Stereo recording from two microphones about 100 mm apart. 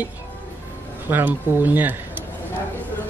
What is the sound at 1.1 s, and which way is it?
Speech, 20° right (ahead or behind).